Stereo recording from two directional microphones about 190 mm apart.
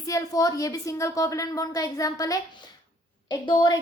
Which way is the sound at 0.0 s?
15° left (ahead or behind).